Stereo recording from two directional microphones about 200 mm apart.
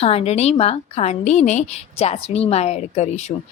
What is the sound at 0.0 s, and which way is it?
A woman's voice, 30° left (ahead or behind).